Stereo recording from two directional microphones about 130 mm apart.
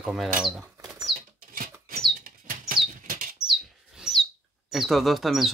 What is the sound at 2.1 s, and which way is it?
Bird, 90° right.